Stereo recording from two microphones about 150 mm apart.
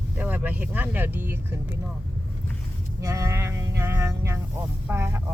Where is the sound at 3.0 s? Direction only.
20° right (ahead or behind).